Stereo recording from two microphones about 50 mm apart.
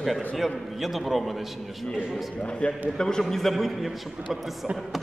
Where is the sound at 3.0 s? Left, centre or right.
Centre.